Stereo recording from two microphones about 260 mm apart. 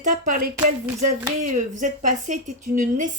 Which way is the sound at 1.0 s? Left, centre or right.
Right.